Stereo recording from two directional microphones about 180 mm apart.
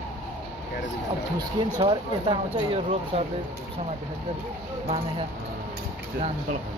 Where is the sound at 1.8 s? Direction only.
30° right (ahead or behind).